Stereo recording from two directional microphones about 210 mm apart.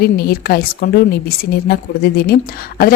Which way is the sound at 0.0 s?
50° left (ahead or behind).